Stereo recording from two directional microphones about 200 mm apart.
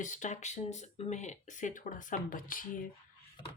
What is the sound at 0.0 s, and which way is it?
Speech, 40° left (ahead or behind).